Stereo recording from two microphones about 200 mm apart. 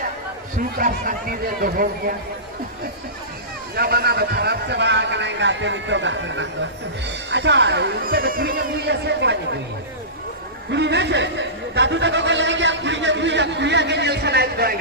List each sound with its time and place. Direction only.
0.8 s a man's voice: 45° right (ahead or behind)
3.8 s a man's voice: 50° right (ahead or behind)
10.7 s a man's voice: 60° right (ahead or behind)